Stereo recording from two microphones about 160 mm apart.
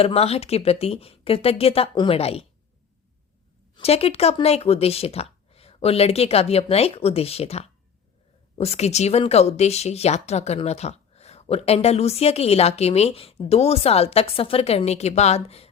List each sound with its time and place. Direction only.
0.0 s speech: 40° left (ahead or behind)
3.8 s speech: 40° left (ahead or behind)